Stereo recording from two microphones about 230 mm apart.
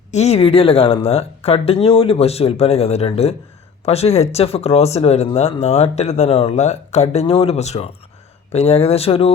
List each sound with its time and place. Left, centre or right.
0.1 s speech: left